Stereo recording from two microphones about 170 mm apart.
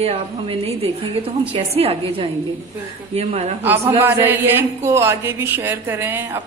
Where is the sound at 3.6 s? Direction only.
10° right (ahead or behind).